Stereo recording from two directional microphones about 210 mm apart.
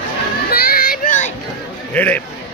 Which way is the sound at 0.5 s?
45° left (ahead or behind).